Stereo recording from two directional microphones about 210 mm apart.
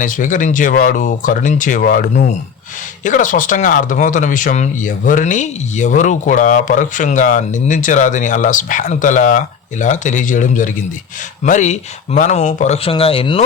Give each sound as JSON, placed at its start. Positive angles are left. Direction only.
{"t": 0.0, "sound": "speech", "side_deg": 40}